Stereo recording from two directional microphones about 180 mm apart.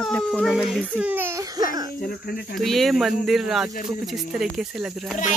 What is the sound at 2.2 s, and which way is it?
Speech, 60° left (ahead or behind).